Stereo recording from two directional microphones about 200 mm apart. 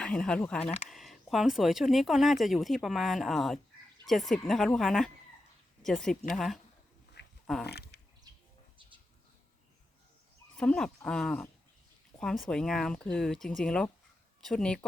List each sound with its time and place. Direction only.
0.0 s speech: 5° left (ahead or behind)
7.7 s a sound: 55° left (ahead or behind)
10.6 s speech: 5° left (ahead or behind)